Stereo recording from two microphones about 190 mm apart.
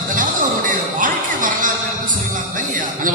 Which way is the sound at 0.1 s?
45° right (ahead or behind).